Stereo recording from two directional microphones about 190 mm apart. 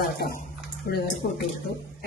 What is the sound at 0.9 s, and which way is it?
Speech, 45° left (ahead or behind).